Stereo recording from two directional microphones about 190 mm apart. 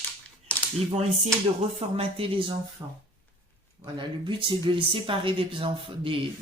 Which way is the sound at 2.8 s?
15° right (ahead or behind).